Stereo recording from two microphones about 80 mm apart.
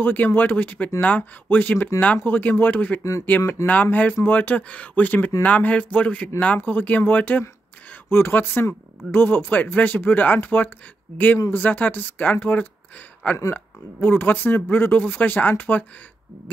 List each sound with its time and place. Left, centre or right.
0.0 s speech: left
3.0 s speech: left
3.3 s speech: left